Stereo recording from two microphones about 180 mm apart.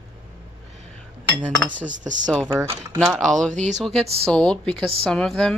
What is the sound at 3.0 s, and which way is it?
Speech, 5° left (ahead or behind).